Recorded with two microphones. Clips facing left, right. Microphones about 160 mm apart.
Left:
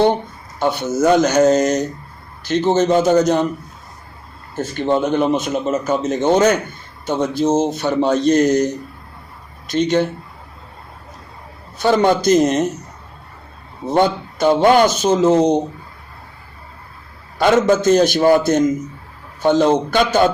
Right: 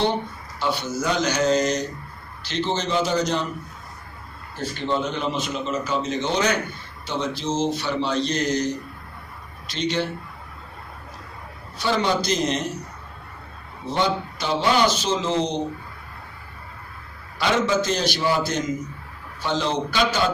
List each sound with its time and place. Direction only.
0.6 s a man's voice: 50° left (ahead or behind)
4.5 s a man's voice: 50° left (ahead or behind)
11.8 s a man's voice: 50° left (ahead or behind)
13.8 s a man's voice: 50° left (ahead or behind)
17.3 s a man's voice: 50° left (ahead or behind)